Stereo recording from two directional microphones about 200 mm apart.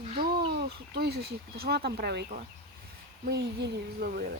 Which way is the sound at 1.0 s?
50° right (ahead or behind).